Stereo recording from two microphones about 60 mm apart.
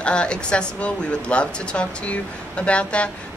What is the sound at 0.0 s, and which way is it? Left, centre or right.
Speech, centre.